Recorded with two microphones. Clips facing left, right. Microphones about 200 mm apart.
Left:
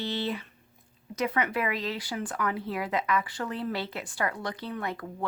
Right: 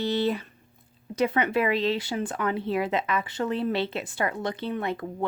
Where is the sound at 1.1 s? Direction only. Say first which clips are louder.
Right 5 dB; 30° right (ahead or behind).